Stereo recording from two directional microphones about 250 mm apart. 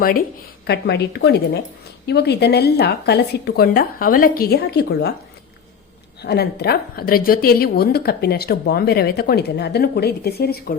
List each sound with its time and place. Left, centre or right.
0.7 s a woman's voice: left
6.2 s a woman's voice: left